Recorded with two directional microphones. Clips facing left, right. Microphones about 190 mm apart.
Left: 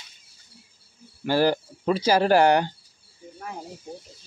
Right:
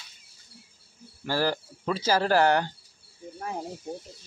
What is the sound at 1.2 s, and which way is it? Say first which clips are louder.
Speech: left 6 dB; 20° left (ahead or behind).